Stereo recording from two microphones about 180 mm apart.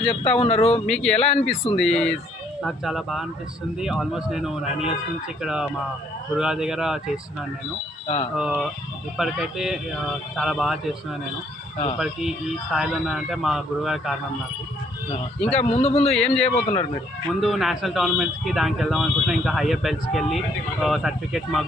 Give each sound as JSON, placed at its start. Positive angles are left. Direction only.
{"t": 0.1, "sound": "speech", "side_deg": 35}
{"t": 0.9, "sound": "speech", "side_deg": 5}
{"t": 8.0, "sound": "speech", "side_deg": 35}
{"t": 8.4, "sound": "speech", "side_deg": 0}
{"t": 12.7, "sound": "speech", "side_deg": 0}
{"t": 15.4, "sound": "speech", "side_deg": 35}
{"t": 16.0, "sound": "speech", "side_deg": 5}
{"t": 16.4, "sound": "speech", "side_deg": 35}
{"t": 17.4, "sound": "speech", "side_deg": 0}